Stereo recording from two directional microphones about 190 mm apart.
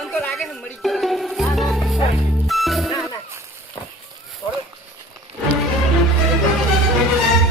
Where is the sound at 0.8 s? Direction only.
Centre (ahead or behind).